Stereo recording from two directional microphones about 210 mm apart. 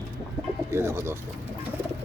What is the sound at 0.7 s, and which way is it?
Speech, 10° right (ahead or behind).